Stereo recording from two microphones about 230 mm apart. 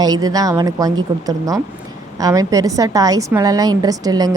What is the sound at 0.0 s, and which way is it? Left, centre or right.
Speech, centre.